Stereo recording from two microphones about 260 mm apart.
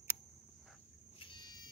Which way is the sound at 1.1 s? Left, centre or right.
Centre.